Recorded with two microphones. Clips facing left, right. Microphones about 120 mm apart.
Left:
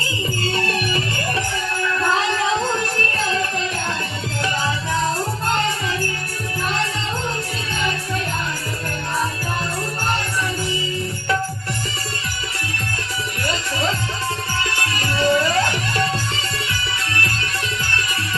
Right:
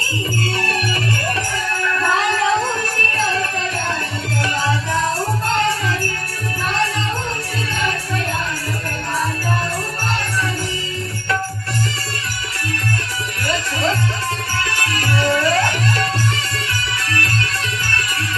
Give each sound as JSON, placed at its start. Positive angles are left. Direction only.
{"t": 0.4, "sound": "music", "side_deg": 20}
{"t": 14.6, "sound": "music", "side_deg": 20}